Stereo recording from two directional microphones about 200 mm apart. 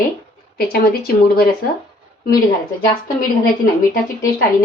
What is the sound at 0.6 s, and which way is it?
A woman's voice, 50° left (ahead or behind).